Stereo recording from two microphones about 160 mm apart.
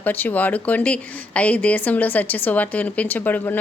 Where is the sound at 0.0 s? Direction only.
10° left (ahead or behind).